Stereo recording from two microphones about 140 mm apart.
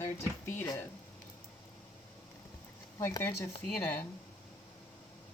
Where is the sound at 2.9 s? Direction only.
20° left (ahead or behind).